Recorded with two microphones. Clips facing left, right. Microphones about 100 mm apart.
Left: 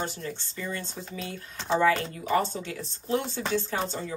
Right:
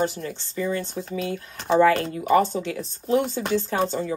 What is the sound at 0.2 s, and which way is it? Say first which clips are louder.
Speech: right 7 dB; 50° right (ahead or behind).